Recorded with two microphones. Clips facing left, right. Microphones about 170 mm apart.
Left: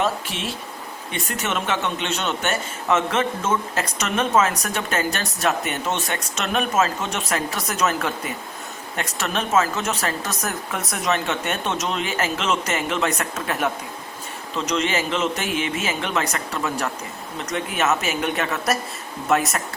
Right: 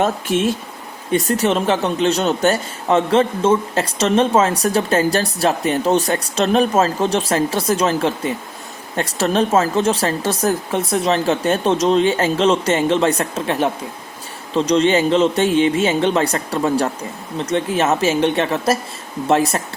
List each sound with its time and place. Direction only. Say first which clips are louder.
0.0 s speech: right 7 dB; 45° right (ahead or behind)
1.1 s speech: right 10 dB; 35° right (ahead or behind)